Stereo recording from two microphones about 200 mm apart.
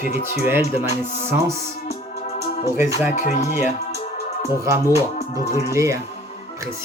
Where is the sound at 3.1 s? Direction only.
40° left (ahead or behind).